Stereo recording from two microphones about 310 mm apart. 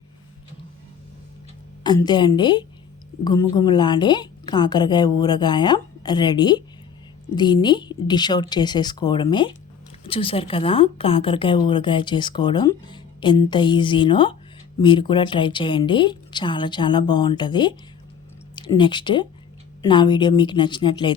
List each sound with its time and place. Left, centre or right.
1.8 s a woman's voice: centre